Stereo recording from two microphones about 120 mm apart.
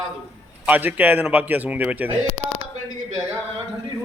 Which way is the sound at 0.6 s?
15° right (ahead or behind).